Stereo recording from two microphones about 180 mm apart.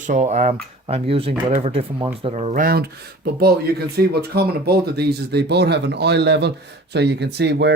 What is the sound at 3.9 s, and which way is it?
Speech, 60° right (ahead or behind).